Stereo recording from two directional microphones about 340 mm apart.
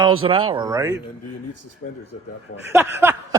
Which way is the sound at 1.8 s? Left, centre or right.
Left.